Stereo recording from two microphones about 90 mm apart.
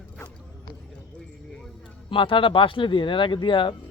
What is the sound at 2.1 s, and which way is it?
Speech, 75° left (ahead or behind).